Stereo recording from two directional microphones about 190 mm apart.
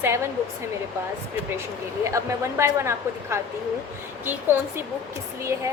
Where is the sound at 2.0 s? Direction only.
15° right (ahead or behind).